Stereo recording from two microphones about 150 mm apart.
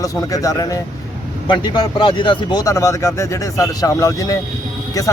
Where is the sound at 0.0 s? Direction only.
20° left (ahead or behind).